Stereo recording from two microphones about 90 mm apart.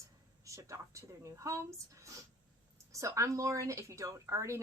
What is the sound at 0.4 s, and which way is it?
A woman's voice, 35° right (ahead or behind).